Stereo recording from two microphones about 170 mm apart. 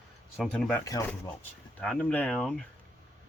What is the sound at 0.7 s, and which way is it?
Speech, 20° left (ahead or behind).